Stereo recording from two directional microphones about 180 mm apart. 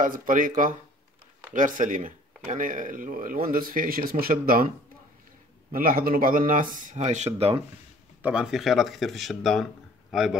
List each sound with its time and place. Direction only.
0.0 s speech: 45° right (ahead or behind)
1.5 s speech: 45° right (ahead or behind)
8.2 s speech: 5° right (ahead or behind)